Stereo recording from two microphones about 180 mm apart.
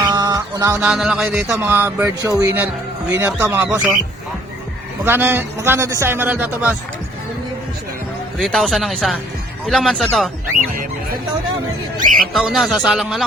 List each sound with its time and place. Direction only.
0.0 s music: 20° right (ahead or behind)
0.9 s a man's voice: 5° right (ahead or behind)
5.0 s a man's voice: 10° right (ahead or behind)
8.4 s speech: centre (ahead or behind)
12.3 s speech: centre (ahead or behind)